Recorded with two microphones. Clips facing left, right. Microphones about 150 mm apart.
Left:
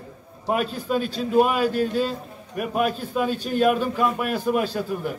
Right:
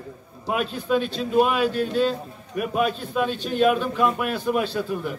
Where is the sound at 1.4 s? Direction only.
10° left (ahead or behind).